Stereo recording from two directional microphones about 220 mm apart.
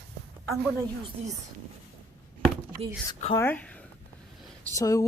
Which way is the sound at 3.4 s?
10° left (ahead or behind).